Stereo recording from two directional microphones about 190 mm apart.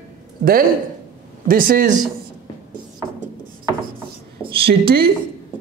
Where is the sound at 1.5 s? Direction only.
50° right (ahead or behind).